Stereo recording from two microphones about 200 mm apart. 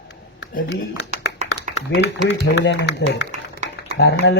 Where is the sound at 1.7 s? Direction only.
60° left (ahead or behind).